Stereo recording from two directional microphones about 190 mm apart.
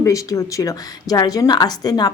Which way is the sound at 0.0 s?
15° left (ahead or behind).